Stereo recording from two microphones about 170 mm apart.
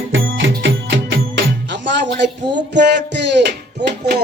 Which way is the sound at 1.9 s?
90° right.